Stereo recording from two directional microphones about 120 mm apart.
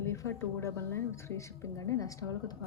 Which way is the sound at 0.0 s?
25° left (ahead or behind).